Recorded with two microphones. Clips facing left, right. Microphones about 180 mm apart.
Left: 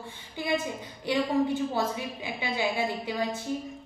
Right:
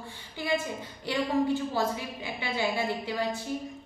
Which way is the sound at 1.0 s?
20° left (ahead or behind).